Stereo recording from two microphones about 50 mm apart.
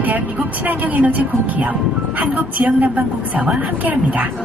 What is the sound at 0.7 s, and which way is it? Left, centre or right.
Speech, right.